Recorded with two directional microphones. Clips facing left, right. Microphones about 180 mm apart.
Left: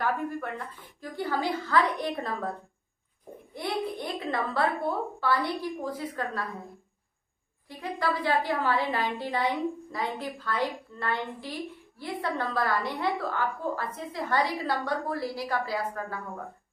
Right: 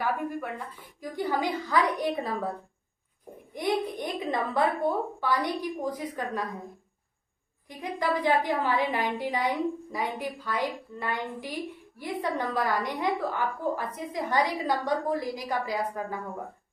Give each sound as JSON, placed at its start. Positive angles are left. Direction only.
{"t": 0.0, "sound": "a woman's voice", "side_deg": -10}
{"t": 3.5, "sound": "a woman's voice", "side_deg": -15}
{"t": 7.7, "sound": "a woman's voice", "side_deg": -15}